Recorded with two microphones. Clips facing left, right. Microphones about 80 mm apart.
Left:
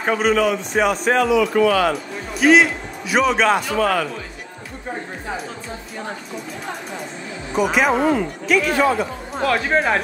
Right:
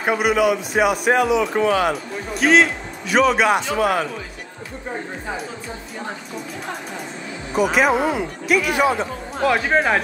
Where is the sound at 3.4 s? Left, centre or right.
Centre.